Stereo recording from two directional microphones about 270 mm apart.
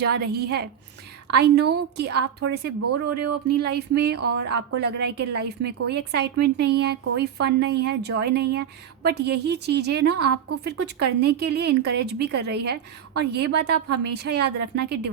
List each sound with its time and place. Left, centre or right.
0.1 s speech: right